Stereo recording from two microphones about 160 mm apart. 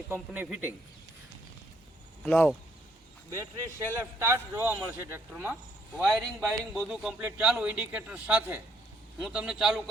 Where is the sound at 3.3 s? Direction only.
15° right (ahead or behind).